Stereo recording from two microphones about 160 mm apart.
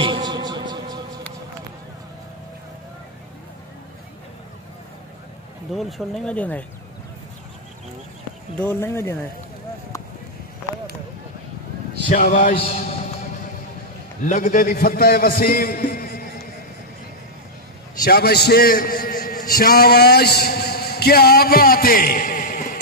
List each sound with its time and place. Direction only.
0.0 s a sound: 30° right (ahead or behind)
5.8 s speech: centre (ahead or behind)
8.5 s speech: 15° left (ahead or behind)
12.1 s speech: 55° left (ahead or behind)
14.2 s a man's voice: 55° left (ahead or behind)
18.0 s a man's voice: 80° left; by 22.8 s 60° left (ahead or behind)